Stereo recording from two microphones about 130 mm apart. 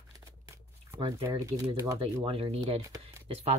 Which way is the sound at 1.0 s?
45° right (ahead or behind).